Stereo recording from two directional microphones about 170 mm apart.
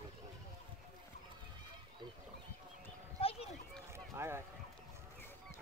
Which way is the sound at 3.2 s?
35° left (ahead or behind).